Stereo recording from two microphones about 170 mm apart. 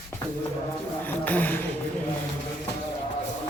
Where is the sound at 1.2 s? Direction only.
10° left (ahead or behind).